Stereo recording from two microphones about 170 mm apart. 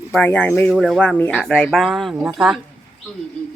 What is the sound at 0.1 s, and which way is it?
Speech, 10° left (ahead or behind).